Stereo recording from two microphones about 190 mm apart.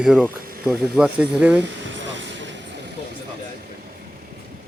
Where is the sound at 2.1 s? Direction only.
70° right (ahead or behind).